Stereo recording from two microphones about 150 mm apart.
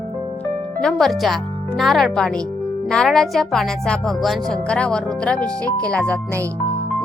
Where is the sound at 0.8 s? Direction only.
5° left (ahead or behind).